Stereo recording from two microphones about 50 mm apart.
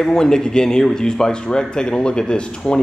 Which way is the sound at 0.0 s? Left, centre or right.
Centre.